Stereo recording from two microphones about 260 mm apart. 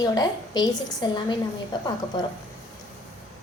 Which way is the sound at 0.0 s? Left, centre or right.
Centre.